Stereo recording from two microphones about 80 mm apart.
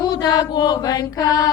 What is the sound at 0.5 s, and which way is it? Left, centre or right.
Mantra, left.